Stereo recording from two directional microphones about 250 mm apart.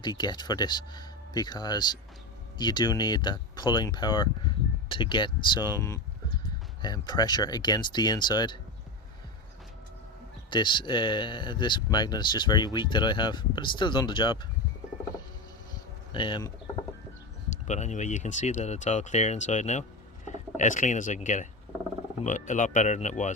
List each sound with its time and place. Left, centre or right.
0.0 s speech: centre
10.5 s speech: centre
16.1 s speech: centre
17.5 s speech: left